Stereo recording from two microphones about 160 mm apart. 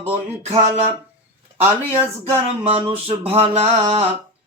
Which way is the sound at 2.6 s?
35° right (ahead or behind).